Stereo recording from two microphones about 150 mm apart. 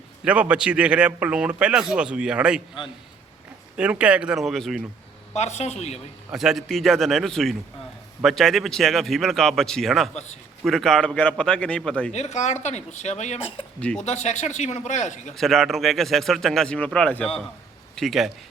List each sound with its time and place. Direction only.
0.3 s a man's voice: 10° right (ahead or behind)
3.8 s a man's voice: 10° right (ahead or behind)
5.3 s speech: 50° left (ahead or behind)
6.3 s speech: centre (ahead or behind)
12.1 s speech: 50° left (ahead or behind)
15.4 s speech: centre (ahead or behind)